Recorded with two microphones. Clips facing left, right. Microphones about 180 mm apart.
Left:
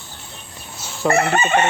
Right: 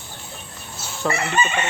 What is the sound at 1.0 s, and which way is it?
Chicken, 50° left (ahead or behind).